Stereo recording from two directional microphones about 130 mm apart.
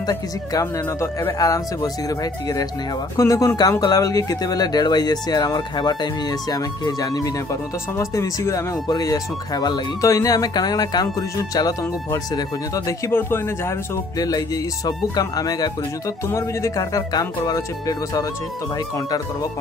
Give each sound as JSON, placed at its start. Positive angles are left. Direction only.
{"t": 0.0, "sound": "speech", "side_deg": 30}